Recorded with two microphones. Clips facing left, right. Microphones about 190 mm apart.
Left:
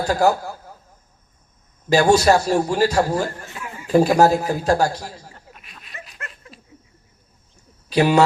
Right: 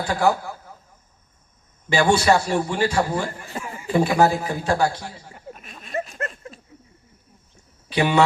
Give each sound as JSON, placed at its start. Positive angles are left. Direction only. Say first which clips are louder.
{"t": 0.0, "sound": "a man's voice", "louder": "left 3 dB", "side_deg": 40}
{"t": 1.9, "sound": "a man's voice", "louder": "left 3 dB", "side_deg": 40}
{"t": 3.6, "sound": "a sound", "louder": "right 3 dB", "side_deg": -45}
{"t": 3.9, "sound": "a man's voice", "louder": "left 4 dB", "side_deg": 40}
{"t": 5.5, "sound": "a sound", "louder": "right 18 dB", "side_deg": -45}
{"t": 7.9, "sound": "speech", "louder": "left 4 dB", "side_deg": 40}